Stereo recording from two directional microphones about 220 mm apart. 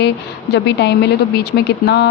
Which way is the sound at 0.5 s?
50° left (ahead or behind).